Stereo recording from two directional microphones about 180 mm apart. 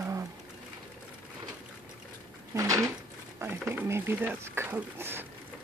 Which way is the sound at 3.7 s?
10° right (ahead or behind).